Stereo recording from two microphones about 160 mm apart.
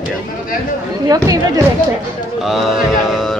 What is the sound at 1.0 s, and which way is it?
Speech, 20° right (ahead or behind).